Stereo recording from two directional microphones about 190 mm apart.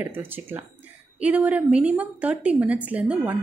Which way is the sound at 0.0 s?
10° right (ahead or behind).